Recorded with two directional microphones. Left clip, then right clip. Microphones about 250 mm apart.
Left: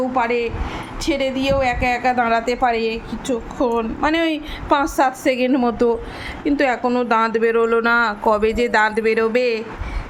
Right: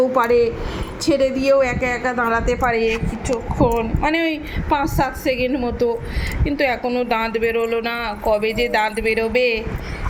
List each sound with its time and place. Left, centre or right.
0.2 s a woman's voice: centre
3.2 s speech: left